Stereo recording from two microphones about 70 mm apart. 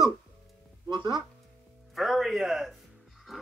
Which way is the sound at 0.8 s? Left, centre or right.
Right.